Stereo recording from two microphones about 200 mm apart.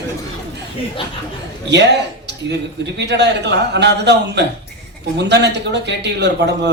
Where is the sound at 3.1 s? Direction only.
60° right (ahead or behind).